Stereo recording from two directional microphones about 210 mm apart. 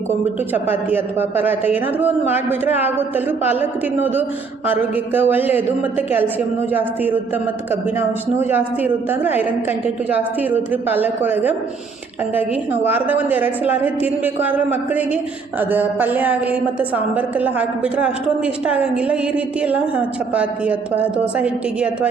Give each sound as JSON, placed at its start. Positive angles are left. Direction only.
{"t": 0.5, "sound": "speech", "side_deg": -10}
{"t": 8.4, "sound": "speech", "side_deg": -10}